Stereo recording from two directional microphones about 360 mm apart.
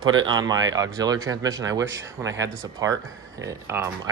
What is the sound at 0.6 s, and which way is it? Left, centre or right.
Speech, centre.